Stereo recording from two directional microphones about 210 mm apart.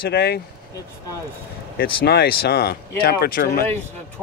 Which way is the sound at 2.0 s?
50° left (ahead or behind).